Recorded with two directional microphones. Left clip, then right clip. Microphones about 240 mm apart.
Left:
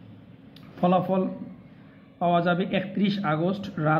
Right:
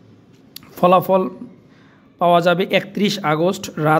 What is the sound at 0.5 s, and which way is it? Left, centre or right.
Speech, right.